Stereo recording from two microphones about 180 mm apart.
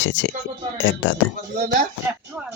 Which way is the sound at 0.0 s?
80° left.